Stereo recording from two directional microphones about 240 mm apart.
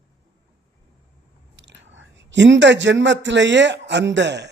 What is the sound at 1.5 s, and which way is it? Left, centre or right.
Speech, right.